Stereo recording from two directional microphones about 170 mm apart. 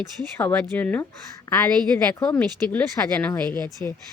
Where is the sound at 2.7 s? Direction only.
10° left (ahead or behind).